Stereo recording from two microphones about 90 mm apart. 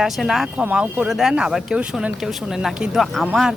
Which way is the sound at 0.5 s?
15° right (ahead or behind).